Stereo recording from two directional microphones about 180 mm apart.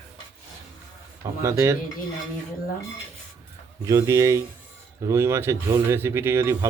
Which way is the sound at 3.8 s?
15° right (ahead or behind).